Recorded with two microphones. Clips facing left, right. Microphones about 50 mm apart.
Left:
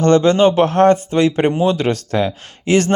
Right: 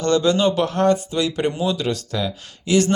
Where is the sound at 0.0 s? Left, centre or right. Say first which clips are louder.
Left 6 dB; left.